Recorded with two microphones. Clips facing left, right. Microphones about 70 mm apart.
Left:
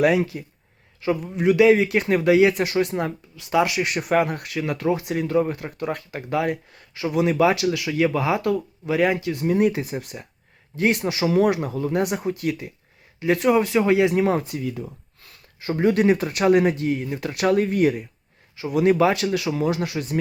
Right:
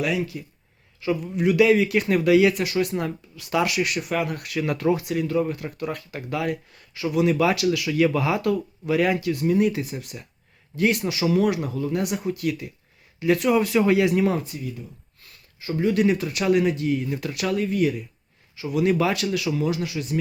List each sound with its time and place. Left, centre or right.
0.0 s speech: left
3.9 s speech: left
4.6 s speech: centre
5.0 s speech: left
14.3 s speech: left
15.6 s speech: left
17.3 s speech: left